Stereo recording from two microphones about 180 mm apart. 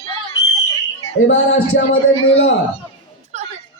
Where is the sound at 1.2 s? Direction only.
80° left.